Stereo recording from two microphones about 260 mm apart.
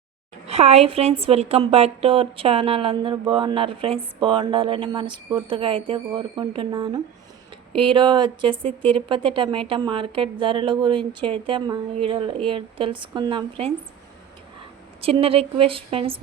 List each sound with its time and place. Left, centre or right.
0.4 s a woman's voice: right
15.0 s a woman's voice: right